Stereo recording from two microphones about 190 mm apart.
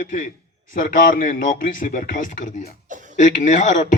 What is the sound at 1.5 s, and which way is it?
A man's voice, 45° left (ahead or behind).